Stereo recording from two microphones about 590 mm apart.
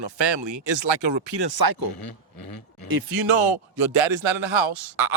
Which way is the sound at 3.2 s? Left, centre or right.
Right.